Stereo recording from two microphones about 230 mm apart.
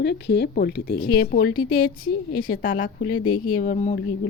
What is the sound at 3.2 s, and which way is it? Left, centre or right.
Speech, left.